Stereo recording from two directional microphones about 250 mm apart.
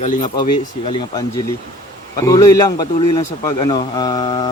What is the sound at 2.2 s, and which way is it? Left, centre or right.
Speech, centre.